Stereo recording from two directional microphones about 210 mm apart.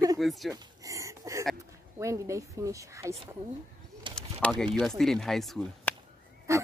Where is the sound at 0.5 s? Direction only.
15° right (ahead or behind).